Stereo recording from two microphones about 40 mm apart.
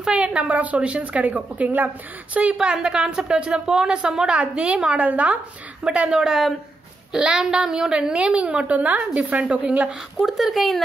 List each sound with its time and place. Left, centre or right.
0.0 s a woman's voice: right
2.5 s a woman's voice: centre
4.9 s a woman's voice: right
5.9 s a woman's voice: right
10.1 s speech: centre